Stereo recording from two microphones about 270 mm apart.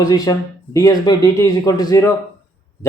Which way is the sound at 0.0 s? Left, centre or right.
Centre.